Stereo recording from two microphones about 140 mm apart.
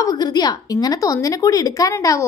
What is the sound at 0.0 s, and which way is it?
A woman's voice, 30° left (ahead or behind).